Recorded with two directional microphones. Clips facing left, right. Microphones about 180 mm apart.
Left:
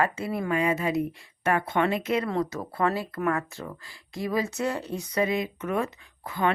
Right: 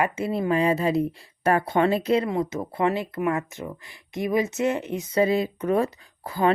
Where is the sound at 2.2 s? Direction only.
20° right (ahead or behind).